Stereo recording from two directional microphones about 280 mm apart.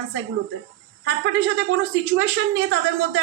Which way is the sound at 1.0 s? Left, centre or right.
Right.